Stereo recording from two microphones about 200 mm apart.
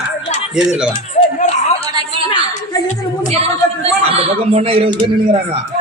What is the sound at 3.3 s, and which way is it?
A woman's voice, 30° right (ahead or behind).